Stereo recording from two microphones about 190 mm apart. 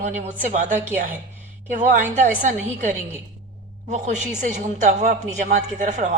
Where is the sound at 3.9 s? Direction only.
40° right (ahead or behind).